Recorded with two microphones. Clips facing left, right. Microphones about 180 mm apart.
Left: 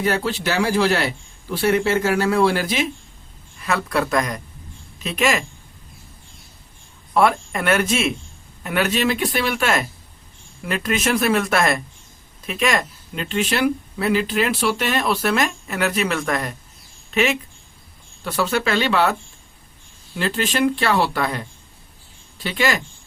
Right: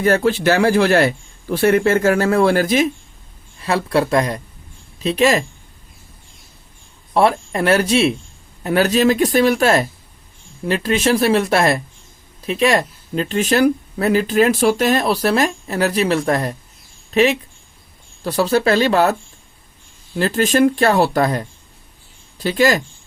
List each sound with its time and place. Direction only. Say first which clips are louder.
0.0 s speech: right 7 dB; 50° right (ahead or behind)
3.6 s speech: right 4 dB; 30° right (ahead or behind)
7.1 s speech: right 2 dB; 30° right (ahead or behind)
20.1 s speech: right 6 dB; 45° right (ahead or behind)